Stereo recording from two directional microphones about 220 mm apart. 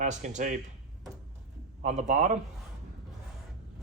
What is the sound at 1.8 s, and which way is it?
Speech, 35° right (ahead or behind).